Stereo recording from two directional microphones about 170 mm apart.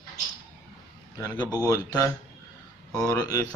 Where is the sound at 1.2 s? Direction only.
25° left (ahead or behind).